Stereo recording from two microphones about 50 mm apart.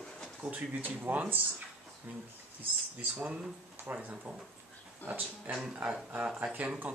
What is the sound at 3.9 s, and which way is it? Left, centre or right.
Speech, right.